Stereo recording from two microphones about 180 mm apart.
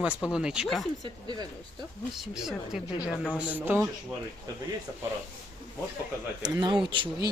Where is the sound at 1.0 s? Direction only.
25° right (ahead or behind).